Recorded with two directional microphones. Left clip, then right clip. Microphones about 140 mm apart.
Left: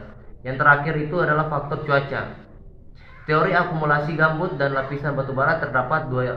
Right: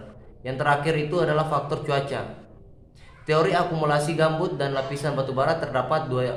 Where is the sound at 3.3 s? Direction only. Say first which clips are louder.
Left 2 dB; 40° right (ahead or behind).